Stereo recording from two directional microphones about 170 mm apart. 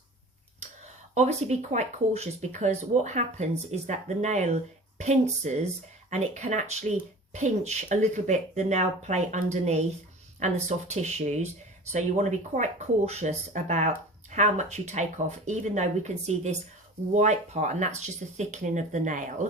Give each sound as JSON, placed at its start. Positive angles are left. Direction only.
{"t": 1.1, "sound": "speech", "side_deg": -40}